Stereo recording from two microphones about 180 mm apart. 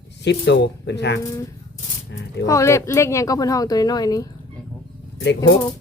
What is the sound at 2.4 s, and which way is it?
Speech, 15° left (ahead or behind).